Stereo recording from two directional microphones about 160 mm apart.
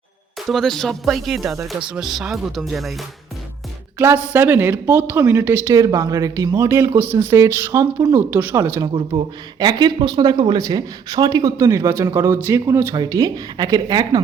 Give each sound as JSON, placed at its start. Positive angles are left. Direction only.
{"t": 0.5, "sound": "speech", "side_deg": 0}
{"t": 3.9, "sound": "speech", "side_deg": -10}
{"t": 9.0, "sound": "speech", "side_deg": -30}